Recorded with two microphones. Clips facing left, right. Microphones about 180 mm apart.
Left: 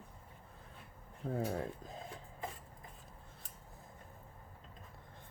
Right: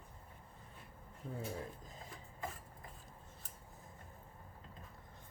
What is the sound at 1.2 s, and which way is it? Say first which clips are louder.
Speech: left 7 dB; 60° left (ahead or behind).